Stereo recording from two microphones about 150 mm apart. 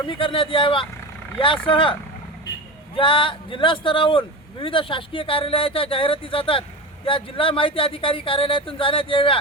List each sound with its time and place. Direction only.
0.0 s a man's voice: 35° left (ahead or behind)